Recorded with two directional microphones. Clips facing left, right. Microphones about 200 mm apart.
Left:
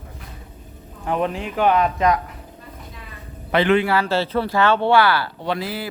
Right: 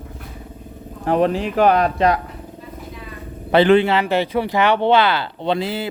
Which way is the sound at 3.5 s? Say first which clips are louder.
Right 4 dB; 30° right (ahead or behind).